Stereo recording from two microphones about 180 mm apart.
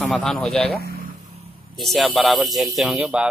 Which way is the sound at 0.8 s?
55° right (ahead or behind).